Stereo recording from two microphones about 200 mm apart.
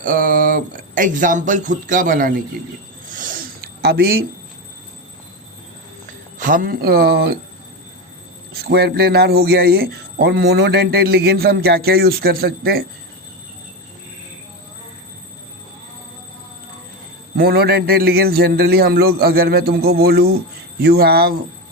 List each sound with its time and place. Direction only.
0.0 s speech: 40° right (ahead or behind)
3.1 s a sound: 40° right (ahead or behind)
6.4 s a man's voice: 45° right (ahead or behind)
8.6 s a man's voice: 50° right (ahead or behind)
17.3 s a man's voice: 50° right (ahead or behind)